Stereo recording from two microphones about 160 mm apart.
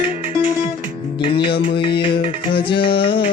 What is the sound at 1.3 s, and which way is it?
Music, 30° left (ahead or behind).